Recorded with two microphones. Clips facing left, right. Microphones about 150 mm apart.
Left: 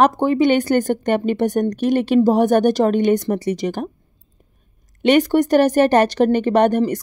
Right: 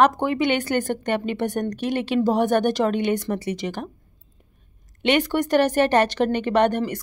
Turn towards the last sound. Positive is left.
turn(degrees=40)  # may be behind; listen again after turning